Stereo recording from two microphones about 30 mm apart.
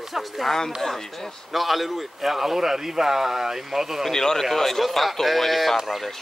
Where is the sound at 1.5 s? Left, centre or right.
Centre.